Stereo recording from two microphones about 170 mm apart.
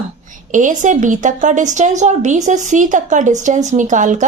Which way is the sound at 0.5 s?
50° right (ahead or behind).